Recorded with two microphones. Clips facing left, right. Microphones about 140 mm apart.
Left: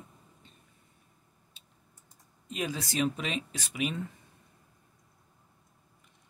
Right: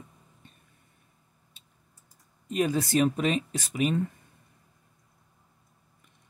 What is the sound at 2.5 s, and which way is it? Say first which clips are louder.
Speech: right 9 dB; 50° right (ahead or behind).